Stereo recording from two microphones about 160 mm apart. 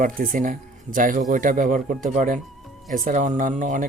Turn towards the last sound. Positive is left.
turn(degrees=-55)  # may be behind; listen again after turning